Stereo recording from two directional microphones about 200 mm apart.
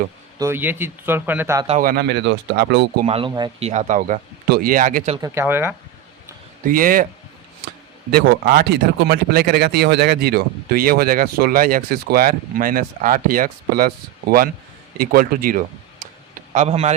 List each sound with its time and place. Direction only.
0.3 s speech: 10° right (ahead or behind)
1.8 s speech: 50° right (ahead or behind)
3.1 s speech: 25° right (ahead or behind)
3.7 s speech: 35° right (ahead or behind)
4.4 s speech: 50° right (ahead or behind)
5.1 s speech: 15° right (ahead or behind)
6.7 s speech: 45° right (ahead or behind)
8.1 s speech: 50° right (ahead or behind)
16.6 s speech: 30° right (ahead or behind)